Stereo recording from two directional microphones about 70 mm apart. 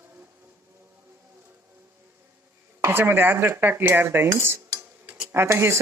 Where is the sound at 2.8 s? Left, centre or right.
Right.